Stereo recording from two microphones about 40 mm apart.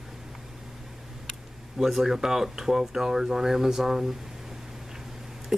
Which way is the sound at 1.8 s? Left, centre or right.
Centre.